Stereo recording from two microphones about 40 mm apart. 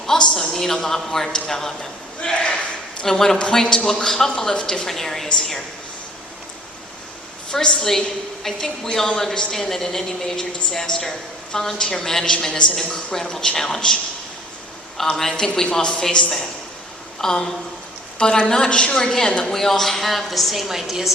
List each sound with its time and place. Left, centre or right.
0.0 s a woman's voice: centre
2.3 s a sound: left
3.0 s a woman's voice: centre
7.5 s a woman's voice: left
7.8 s a woman's voice: centre
15.1 s a woman's voice: centre
19.5 s a woman's voice: centre